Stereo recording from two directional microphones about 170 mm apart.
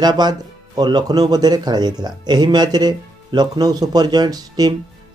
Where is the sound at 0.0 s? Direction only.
25° right (ahead or behind).